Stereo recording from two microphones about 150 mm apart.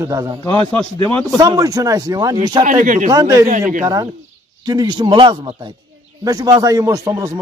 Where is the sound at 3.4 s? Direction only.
55° right (ahead or behind).